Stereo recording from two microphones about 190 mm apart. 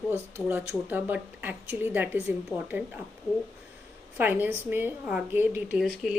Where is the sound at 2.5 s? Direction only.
20° left (ahead or behind).